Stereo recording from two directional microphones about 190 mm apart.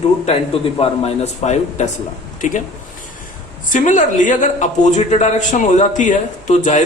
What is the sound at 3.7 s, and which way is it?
A man's voice, 40° left (ahead or behind).